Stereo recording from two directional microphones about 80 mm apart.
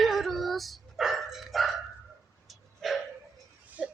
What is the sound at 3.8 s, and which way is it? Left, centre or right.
Wail, centre.